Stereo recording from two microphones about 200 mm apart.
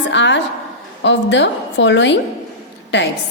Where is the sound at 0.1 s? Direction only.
65° left (ahead or behind).